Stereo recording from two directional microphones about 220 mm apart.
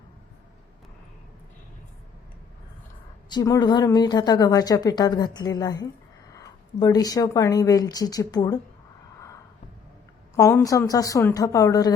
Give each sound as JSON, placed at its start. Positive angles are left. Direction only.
{"t": 3.2, "sound": "a woman's voice", "side_deg": 15}
{"t": 10.3, "sound": "a woman's voice", "side_deg": 15}